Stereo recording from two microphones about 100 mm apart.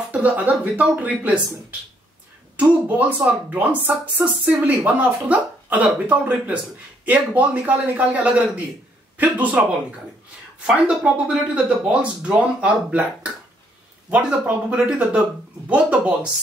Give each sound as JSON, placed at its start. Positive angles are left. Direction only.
{"t": 0.1, "sound": "a man's voice", "side_deg": -15}
{"t": 10.7, "sound": "speech", "side_deg": -5}